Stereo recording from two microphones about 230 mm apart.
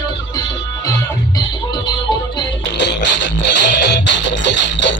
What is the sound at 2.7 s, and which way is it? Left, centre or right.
Music, left.